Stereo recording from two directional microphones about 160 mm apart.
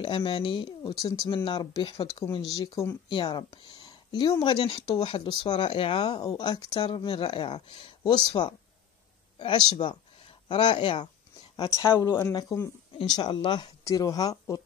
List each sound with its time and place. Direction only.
0.0 s speech: 35° left (ahead or behind); by 3.0 s 15° left (ahead or behind)
3.1 s speech: 30° left (ahead or behind)
6.1 s speech: 25° left (ahead or behind)
11.8 s speech: 20° left (ahead or behind)